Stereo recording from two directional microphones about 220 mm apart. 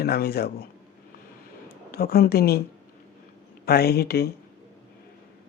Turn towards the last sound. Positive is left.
turn(degrees=45)  # may be behind; listen again after turning